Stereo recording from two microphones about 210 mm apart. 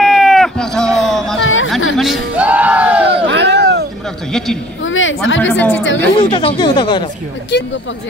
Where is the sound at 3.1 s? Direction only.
55° right (ahead or behind).